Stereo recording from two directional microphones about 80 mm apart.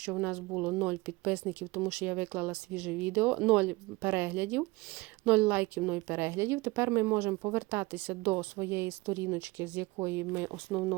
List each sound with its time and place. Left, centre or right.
0.0 s speech: centre
6.2 s speech: right
10.7 s speech: centre